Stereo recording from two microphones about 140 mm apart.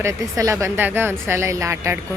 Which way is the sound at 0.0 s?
20° right (ahead or behind).